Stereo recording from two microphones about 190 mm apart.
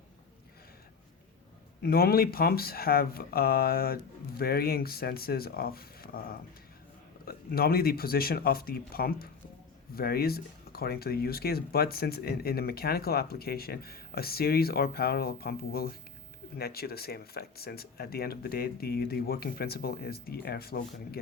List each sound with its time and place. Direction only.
1.8 s speech: 55° left (ahead or behind)
7.3 s speech: 55° left (ahead or behind)